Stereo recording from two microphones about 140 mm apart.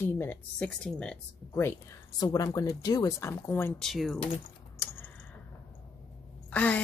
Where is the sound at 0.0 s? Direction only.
15° left (ahead or behind).